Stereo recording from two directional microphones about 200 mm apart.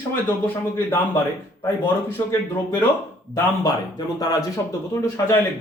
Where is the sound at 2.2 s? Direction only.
15° left (ahead or behind).